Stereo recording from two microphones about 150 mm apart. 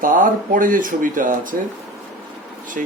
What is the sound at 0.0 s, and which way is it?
Speech, 65° right (ahead or behind).